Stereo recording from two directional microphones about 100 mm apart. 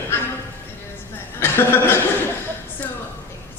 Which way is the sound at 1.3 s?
25° left (ahead or behind).